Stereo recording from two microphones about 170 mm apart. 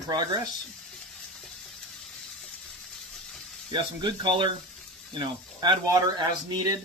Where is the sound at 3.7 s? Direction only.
25° right (ahead or behind).